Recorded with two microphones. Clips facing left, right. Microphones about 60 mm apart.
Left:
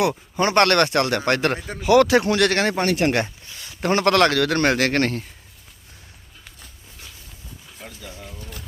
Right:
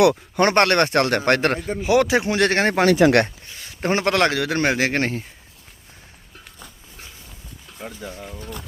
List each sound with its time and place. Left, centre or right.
0.0 s speech: right
0.6 s speech: right
0.9 s speech: right
1.8 s speech: centre
2.7 s speech: right
3.6 s a man's voice: right
7.8 s a man's voice: centre